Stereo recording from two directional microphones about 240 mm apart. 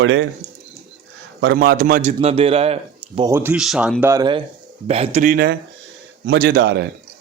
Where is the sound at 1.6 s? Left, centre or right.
Right.